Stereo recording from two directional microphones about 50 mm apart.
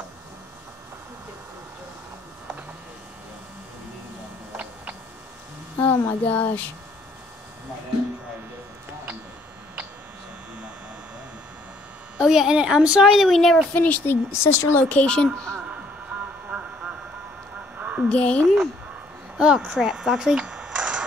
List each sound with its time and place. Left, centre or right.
5.8 s speech: left
12.3 s speech: centre
12.5 s speech: centre
13.1 s speech: centre
13.7 s speech: left
14.0 s speech: left
14.8 s speech: left
16.4 s a sound: right
18.0 s a woman's voice: left
19.3 s speech: centre
20.4 s a sound: centre